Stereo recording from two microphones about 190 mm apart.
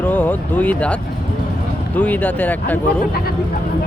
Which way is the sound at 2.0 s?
10° left (ahead or behind).